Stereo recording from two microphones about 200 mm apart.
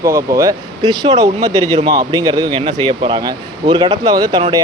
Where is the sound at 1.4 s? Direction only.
30° right (ahead or behind).